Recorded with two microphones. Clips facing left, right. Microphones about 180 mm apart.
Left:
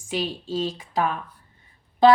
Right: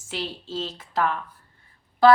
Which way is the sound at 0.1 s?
15° left (ahead or behind).